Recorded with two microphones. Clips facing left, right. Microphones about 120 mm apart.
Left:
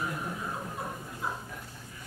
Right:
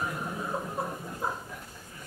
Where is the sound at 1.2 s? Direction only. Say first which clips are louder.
Right 2 dB; 45° right (ahead or behind).